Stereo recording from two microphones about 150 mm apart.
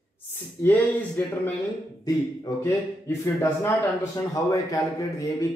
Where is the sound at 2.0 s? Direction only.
25° left (ahead or behind).